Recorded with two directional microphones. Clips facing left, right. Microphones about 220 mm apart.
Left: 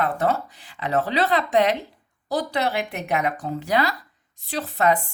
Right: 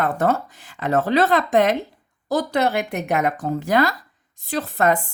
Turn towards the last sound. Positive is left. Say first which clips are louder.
# right 2 dB
turn(degrees=-50)  # may be behind; listen again after turning